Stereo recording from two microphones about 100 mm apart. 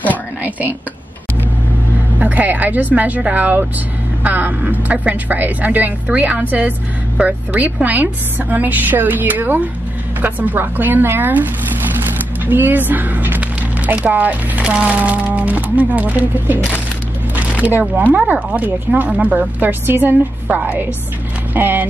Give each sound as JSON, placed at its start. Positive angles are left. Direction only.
{"t": 0.4, "sound": "speech", "side_deg": -15}
{"t": 2.1, "sound": "speech", "side_deg": -15}
{"t": 12.4, "sound": "speech", "side_deg": -20}